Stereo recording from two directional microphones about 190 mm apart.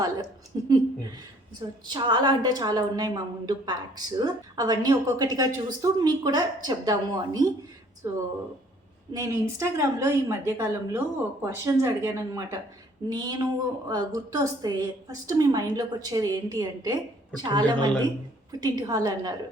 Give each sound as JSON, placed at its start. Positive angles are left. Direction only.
{"t": 0.5, "sound": "a sound", "side_deg": -20}
{"t": 1.9, "sound": "a woman's voice", "side_deg": -25}
{"t": 9.1, "sound": "a woman's voice", "side_deg": -15}